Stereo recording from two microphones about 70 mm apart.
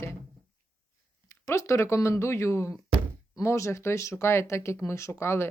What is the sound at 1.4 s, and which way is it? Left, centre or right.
Speech, left.